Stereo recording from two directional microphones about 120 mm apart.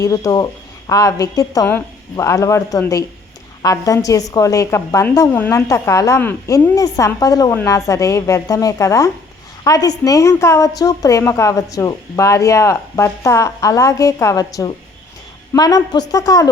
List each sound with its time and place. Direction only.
0.0 s a woman's voice: 30° left (ahead or behind)